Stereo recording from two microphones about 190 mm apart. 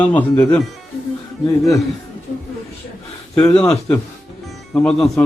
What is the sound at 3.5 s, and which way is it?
Speech, 5° left (ahead or behind).